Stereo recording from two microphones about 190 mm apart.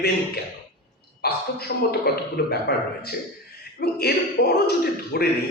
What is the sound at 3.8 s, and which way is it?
Speech, 55° left (ahead or behind).